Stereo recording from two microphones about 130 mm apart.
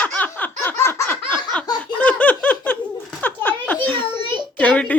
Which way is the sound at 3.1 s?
10° left (ahead or behind).